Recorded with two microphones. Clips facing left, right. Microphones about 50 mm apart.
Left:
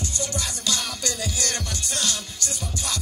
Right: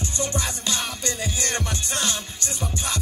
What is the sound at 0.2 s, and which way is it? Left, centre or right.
Music, right.